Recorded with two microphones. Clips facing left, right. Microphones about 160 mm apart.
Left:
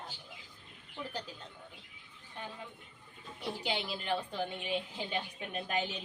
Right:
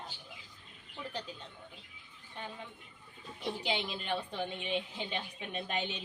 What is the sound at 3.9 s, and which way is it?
A woman's voice, 5° left (ahead or behind).